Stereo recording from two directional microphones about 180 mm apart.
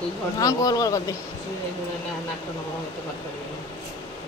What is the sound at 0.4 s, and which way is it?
Speech, 20° left (ahead or behind).